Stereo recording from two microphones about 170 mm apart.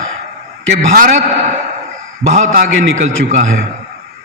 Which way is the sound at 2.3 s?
55° right (ahead or behind).